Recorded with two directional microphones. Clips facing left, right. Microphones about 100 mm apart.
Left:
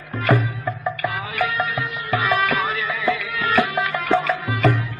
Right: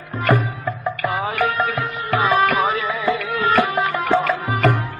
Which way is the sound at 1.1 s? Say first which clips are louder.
Right 3 dB; 35° right (ahead or behind).